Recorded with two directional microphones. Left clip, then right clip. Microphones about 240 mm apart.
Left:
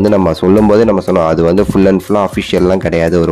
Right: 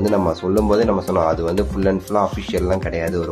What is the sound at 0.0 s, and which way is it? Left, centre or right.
Speech, left.